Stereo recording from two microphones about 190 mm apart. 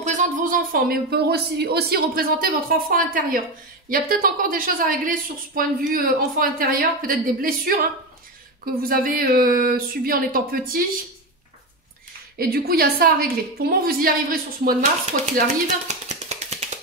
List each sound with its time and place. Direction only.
0.0 s a woman's voice: 40° right (ahead or behind)
8.8 s a woman's voice: 50° right (ahead or behind)
12.4 s a woman's voice: 55° right (ahead or behind)
15.3 s a sound: 40° right (ahead or behind)